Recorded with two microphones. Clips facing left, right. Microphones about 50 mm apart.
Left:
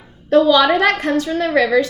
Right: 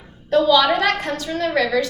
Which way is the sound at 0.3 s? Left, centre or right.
Left.